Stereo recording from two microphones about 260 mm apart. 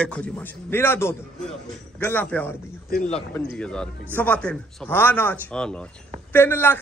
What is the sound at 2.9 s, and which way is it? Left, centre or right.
Speech, left.